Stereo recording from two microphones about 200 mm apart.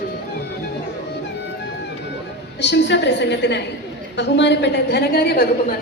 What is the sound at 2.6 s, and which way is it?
A woman's voice, 60° left (ahead or behind).